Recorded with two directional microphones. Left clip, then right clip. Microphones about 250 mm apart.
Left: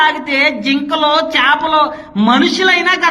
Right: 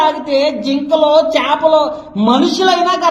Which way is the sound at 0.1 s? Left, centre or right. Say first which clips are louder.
Even; left.